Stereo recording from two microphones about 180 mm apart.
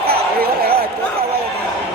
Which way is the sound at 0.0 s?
60° right (ahead or behind).